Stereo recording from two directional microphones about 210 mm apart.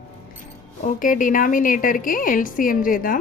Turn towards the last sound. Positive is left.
turn(degrees=40)  # may be behind; listen again after turning